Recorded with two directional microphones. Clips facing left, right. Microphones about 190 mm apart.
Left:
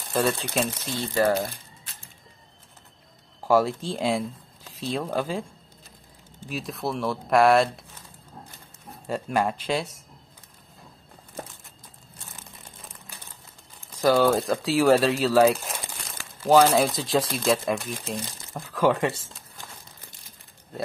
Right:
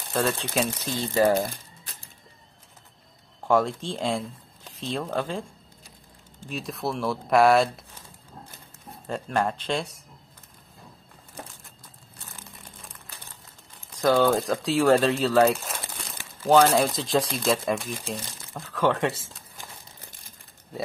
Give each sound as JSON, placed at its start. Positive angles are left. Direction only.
{"t": 0.1, "sound": "speech", "side_deg": 0}
{"t": 0.9, "sound": "speech", "side_deg": -20}
{"t": 3.4, "sound": "speech", "side_deg": 5}
{"t": 6.4, "sound": "speech", "side_deg": 0}
{"t": 9.0, "sound": "speech", "side_deg": 5}
{"t": 14.0, "sound": "speech", "side_deg": 0}